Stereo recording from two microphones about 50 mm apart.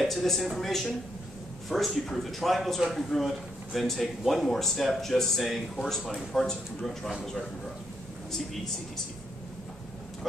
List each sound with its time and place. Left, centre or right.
0.0 s a man's voice: centre